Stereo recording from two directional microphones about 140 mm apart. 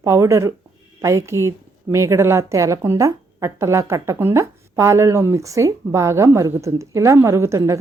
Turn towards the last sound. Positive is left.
turn(degrees=-20)  # may be behind; listen again after turning